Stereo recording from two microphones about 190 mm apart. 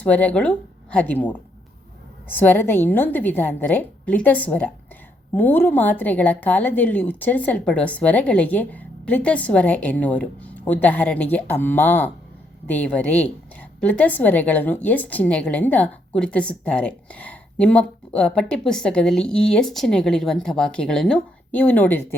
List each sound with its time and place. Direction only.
0.0 s a woman's voice: 5° left (ahead or behind)